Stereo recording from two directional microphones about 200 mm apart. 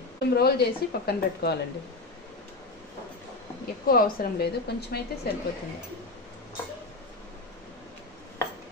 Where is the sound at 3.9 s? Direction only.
45° left (ahead or behind).